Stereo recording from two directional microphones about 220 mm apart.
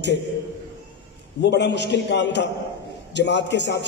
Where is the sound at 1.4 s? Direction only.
50° left (ahead or behind).